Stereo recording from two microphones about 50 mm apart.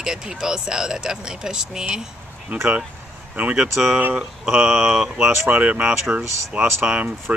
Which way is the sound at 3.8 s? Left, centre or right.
Right.